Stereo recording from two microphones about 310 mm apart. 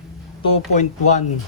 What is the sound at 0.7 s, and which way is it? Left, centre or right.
Speech, left.